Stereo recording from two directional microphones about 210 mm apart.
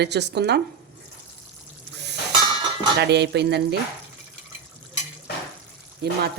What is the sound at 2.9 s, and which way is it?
Stir, 55° right (ahead or behind).